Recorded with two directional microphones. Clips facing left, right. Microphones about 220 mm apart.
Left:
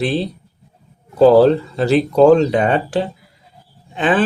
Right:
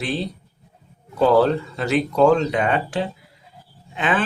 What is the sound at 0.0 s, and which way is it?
Speech, 35° left (ahead or behind).